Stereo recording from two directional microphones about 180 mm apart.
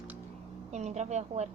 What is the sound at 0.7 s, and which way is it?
Speech, 40° right (ahead or behind).